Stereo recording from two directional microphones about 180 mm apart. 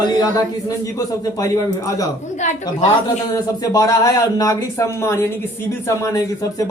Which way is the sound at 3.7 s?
20° left (ahead or behind).